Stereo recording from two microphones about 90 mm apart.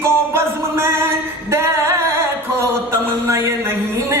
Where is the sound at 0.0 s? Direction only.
30° right (ahead or behind).